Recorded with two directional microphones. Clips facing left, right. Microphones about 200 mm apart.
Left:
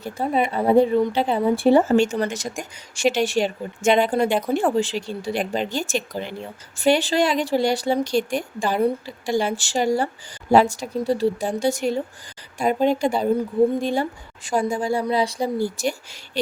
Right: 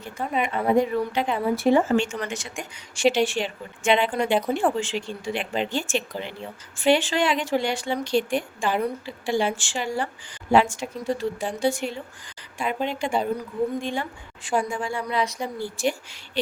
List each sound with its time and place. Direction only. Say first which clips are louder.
0.0 s speech: left 5 dB; 35° left (ahead or behind)
4.3 s speech: even; 5° right (ahead or behind)
4.8 s speech: left 4 dB; 35° left (ahead or behind)